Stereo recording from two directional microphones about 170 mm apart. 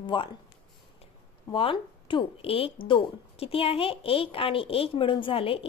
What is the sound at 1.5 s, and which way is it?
Speech, 30° left (ahead or behind).